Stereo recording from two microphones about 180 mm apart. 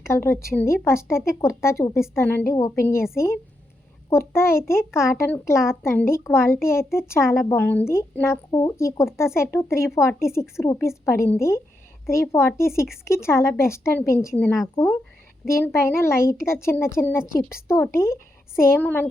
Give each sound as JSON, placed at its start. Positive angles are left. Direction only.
{"t": 0.1, "sound": "a woman's voice", "side_deg": 15}
{"t": 4.3, "sound": "a woman's voice", "side_deg": 15}